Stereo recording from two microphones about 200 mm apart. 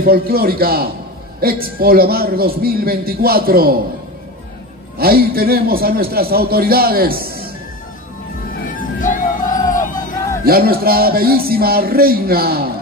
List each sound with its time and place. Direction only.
0.0 s a man's voice: 50° right (ahead or behind)
4.9 s a man's voice: 50° right (ahead or behind)
9.0 s music: 40° left (ahead or behind)
9.7 s a sound: 40° left (ahead or behind)
10.4 s a man's voice: 50° right (ahead or behind)